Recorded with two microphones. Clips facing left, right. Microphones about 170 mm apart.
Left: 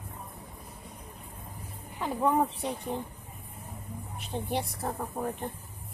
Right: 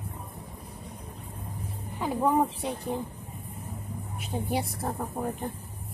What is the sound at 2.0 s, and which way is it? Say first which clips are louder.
Speech: right 2 dB; 5° right (ahead or behind).